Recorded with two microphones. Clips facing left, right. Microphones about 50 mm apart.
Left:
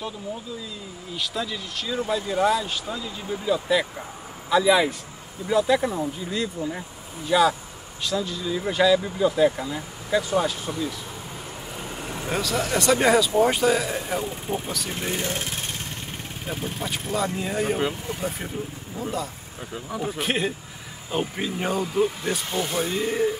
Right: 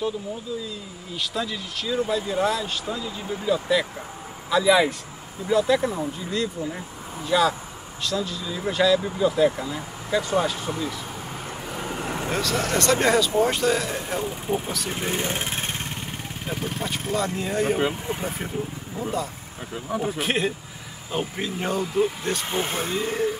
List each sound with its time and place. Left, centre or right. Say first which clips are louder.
1.1 s speech: right 1 dB; centre
11.7 s vehicle: right 5 dB; right
12.3 s speech: left 1 dB; centre; by 15.7 s right
17.1 s speech: even; centre
17.7 s speech: right 2 dB; centre
18.9 s speech: right 1 dB; centre
22.5 s speech: left 2 dB; right
22.8 s speech: left 1 dB; centre